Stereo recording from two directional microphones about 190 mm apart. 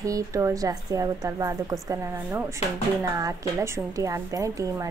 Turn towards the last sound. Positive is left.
turn(degrees=-15)  # may be behind; listen again after turning